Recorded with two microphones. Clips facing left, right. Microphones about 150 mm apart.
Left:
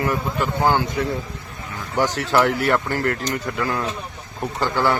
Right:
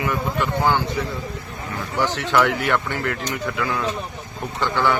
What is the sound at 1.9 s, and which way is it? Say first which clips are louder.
Speech: left 1 dB; 40° left (ahead or behind).